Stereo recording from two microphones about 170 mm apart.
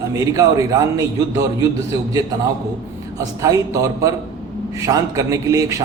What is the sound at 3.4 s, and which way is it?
Speech, 20° right (ahead or behind).